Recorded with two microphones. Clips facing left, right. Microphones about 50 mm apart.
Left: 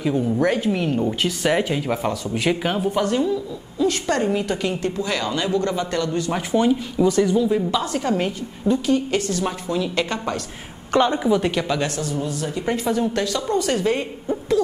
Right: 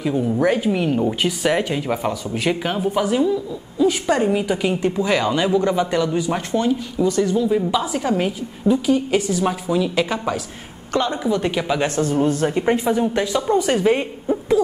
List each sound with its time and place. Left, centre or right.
0.0 s a woman's voice: centre
6.5 s speech: centre
7.2 s a woman's voice: centre
10.9 s a woman's voice: centre
11.2 s speech: centre
11.5 s speech: centre
11.8 s speech: right
12.6 s speech: centre